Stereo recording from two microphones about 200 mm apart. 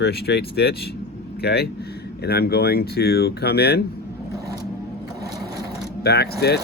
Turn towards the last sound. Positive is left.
turn(degrees=55)  # may be behind; listen again after turning